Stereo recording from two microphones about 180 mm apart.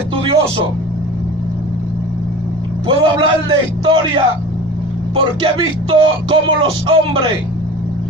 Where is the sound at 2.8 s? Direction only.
30° right (ahead or behind).